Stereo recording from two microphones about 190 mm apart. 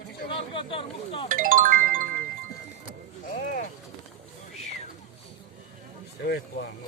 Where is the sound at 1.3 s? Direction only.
45° right (ahead or behind).